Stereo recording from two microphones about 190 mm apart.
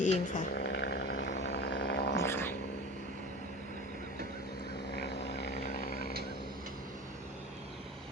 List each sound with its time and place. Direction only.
0.0 s a sound: 40° left (ahead or behind); by 2.2 s 60° left (ahead or behind)
2.2 s dog: 10° left (ahead or behind)
5.5 s vehicle: 40° left (ahead or behind)